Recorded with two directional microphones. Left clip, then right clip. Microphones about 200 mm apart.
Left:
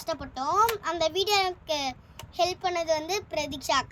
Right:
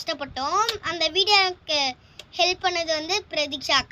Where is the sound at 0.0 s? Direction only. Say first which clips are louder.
Right 3 dB; 5° left (ahead or behind).